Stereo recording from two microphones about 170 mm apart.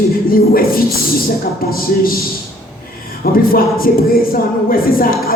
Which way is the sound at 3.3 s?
60° left (ahead or behind).